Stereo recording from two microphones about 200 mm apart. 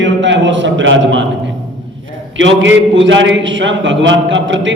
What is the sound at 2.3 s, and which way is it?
A man's voice, 70° right (ahead or behind).